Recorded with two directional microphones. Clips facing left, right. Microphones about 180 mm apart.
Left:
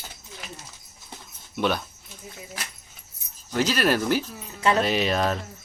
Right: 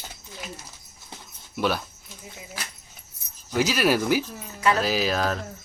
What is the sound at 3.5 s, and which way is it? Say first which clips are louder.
Speech: right 1 dB; 10° right (ahead or behind).